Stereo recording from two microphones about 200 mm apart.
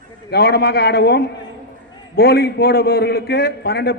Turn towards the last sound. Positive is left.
turn(degrees=50)  # may be behind; listen again after turning